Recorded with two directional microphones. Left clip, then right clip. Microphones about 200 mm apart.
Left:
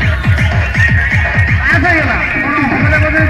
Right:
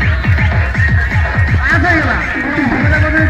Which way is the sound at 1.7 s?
30° right (ahead or behind).